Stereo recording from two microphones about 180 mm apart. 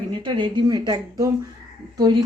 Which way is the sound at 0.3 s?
25° right (ahead or behind).